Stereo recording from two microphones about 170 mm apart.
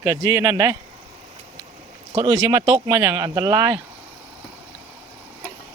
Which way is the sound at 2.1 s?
30° right (ahead or behind).